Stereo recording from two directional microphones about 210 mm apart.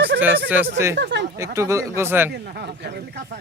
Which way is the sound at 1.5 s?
15° right (ahead or behind).